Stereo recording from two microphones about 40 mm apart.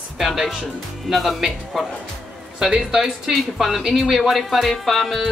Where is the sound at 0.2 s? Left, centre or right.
Centre.